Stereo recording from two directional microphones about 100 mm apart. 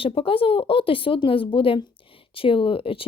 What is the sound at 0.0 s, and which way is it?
A woman's voice, 65° left (ahead or behind).